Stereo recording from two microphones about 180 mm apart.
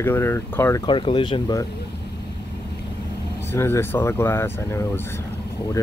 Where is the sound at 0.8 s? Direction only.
30° left (ahead or behind).